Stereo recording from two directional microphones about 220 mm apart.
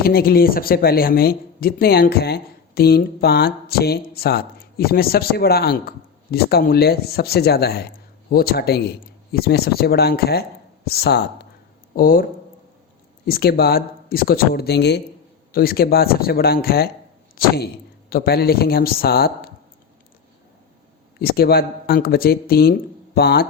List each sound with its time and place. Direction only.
0.0 s speech: 45° left (ahead or behind)
13.2 s speech: 45° left (ahead or behind)
21.2 s speech: 45° left (ahead or behind)